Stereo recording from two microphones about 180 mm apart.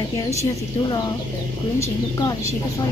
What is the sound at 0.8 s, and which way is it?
Speech, 25° left (ahead or behind).